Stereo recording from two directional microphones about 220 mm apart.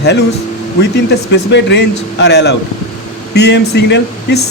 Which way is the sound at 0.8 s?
50° left (ahead or behind).